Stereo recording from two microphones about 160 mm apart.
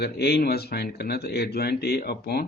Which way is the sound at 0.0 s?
80° left.